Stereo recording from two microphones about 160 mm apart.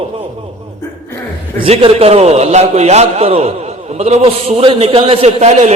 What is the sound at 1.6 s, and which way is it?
A man's voice, 35° right (ahead or behind).